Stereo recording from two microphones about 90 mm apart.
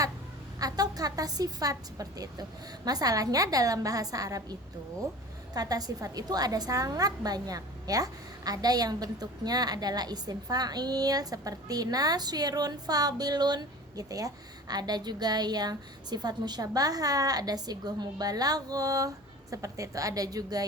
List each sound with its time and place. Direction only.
0.6 s a woman's voice: 45° right (ahead or behind)
5.5 s a woman's voice: 45° right (ahead or behind)